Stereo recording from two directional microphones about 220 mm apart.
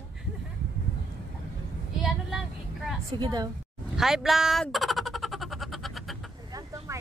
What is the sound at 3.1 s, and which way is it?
Speech, 20° right (ahead or behind).